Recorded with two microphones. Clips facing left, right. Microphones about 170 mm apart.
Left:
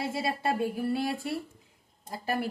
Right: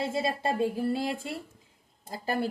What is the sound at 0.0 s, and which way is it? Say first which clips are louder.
A woman's voice: right 1 dB; 25° right (ahead or behind).